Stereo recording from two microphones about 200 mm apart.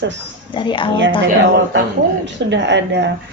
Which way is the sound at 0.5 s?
25° left (ahead or behind).